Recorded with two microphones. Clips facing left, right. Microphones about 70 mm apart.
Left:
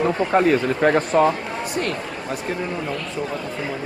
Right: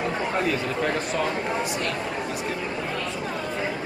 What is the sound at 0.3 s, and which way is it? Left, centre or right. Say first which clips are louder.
A man's voice: left 8 dB; left.